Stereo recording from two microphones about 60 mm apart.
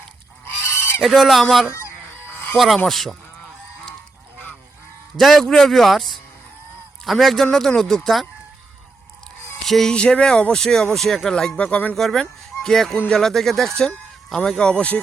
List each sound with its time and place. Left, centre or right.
0.4 s goose: left
1.0 s a man's voice: centre
5.1 s a man's voice: centre
9.6 s music: centre
9.9 s speech: centre
11.9 s a man's voice: centre